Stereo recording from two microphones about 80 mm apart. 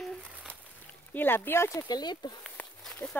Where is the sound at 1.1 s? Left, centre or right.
Left.